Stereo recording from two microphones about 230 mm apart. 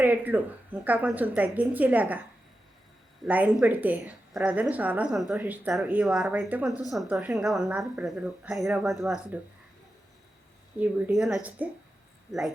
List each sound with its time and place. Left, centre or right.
0.0 s a woman's voice: centre
3.2 s a woman's voice: centre
10.8 s a woman's voice: centre